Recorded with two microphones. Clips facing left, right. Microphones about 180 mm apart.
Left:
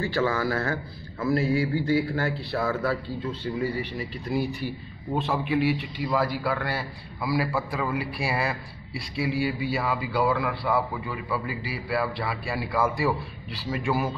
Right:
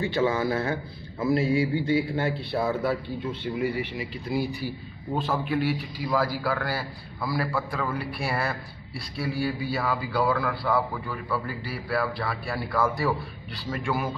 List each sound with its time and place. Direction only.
0.0 s a man's voice: 20° right (ahead or behind)
5.1 s a man's voice: centre (ahead or behind)